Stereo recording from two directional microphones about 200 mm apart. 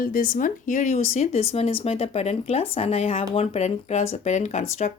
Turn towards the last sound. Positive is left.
turn(degrees=35)  # may be behind; listen again after turning